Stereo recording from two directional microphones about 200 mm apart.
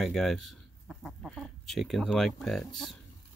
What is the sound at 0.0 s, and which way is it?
Speech, centre (ahead or behind).